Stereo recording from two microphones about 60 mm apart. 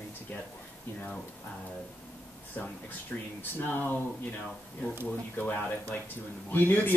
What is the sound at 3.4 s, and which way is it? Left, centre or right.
Speech, left.